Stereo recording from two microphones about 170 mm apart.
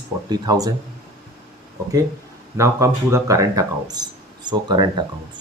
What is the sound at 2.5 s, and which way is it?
Speech, 15° right (ahead or behind).